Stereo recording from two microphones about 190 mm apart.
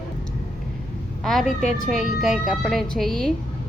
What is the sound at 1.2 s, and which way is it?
A woman's voice, centre (ahead or behind).